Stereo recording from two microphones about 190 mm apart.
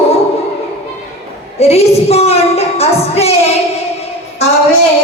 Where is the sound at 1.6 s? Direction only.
35° left (ahead or behind).